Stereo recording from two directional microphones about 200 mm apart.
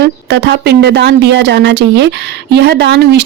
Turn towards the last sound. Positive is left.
turn(degrees=-60)  # may be behind; listen again after turning